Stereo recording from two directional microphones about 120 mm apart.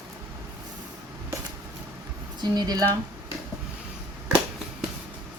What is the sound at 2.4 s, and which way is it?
Speech, 35° right (ahead or behind).